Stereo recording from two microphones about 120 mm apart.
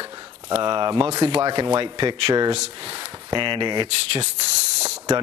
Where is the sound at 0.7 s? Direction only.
40° right (ahead or behind).